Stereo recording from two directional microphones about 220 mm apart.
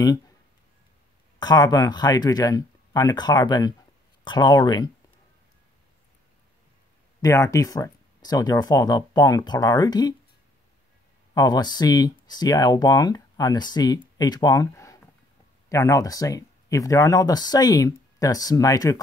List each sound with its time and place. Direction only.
1.4 s speech: 20° left (ahead or behind)
7.2 s speech: 15° left (ahead or behind)
11.3 s speech: 20° left (ahead or behind)